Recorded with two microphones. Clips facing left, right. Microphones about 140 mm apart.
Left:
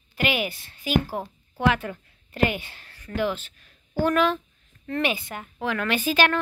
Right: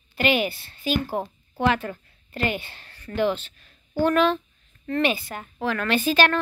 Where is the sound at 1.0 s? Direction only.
20° right (ahead or behind).